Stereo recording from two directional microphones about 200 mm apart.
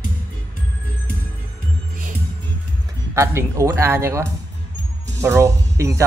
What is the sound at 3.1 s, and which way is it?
Speech, 15° right (ahead or behind).